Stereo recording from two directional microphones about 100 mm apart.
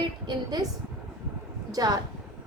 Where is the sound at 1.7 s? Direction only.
40° right (ahead or behind).